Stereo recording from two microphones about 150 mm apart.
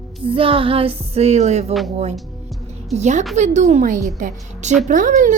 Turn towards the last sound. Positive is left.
turn(degrees=-55)  # may be behind; listen again after turning